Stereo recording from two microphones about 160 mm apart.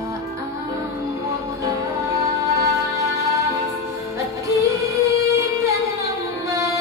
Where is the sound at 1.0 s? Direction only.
20° right (ahead or behind).